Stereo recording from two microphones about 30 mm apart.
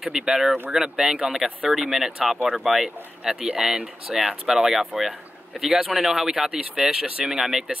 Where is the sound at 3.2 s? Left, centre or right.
Right.